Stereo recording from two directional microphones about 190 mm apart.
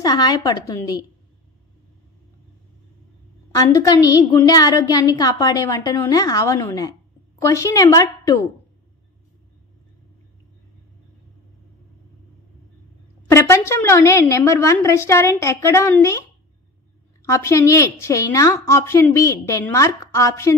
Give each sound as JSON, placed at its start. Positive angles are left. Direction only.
{"t": 0.0, "sound": "a woman's voice", "side_deg": 20}
{"t": 3.5, "sound": "a woman's voice", "side_deg": 15}
{"t": 13.3, "sound": "a woman's voice", "side_deg": 15}